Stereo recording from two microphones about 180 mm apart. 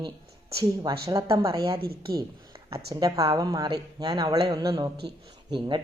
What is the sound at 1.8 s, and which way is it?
Speech, 60° right (ahead or behind).